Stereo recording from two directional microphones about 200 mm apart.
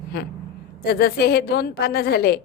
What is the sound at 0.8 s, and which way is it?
A woman's voice, 55° left (ahead or behind).